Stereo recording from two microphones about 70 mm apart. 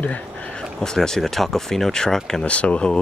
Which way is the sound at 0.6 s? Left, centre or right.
Centre.